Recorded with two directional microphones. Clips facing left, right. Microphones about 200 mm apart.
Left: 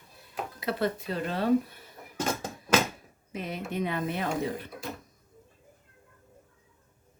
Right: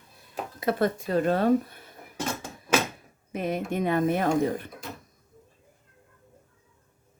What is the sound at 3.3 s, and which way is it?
Speech, 50° right (ahead or behind).